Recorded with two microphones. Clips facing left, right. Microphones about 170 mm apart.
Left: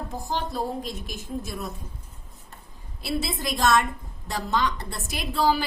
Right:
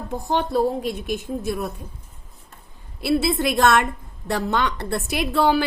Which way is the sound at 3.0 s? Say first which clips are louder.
Right 9 dB; 65° right (ahead or behind).